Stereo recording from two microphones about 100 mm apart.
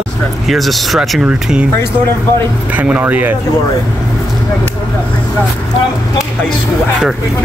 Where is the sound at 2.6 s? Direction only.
15° right (ahead or behind).